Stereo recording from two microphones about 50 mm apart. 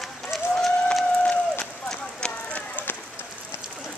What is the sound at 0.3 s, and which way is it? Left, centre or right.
Run, centre.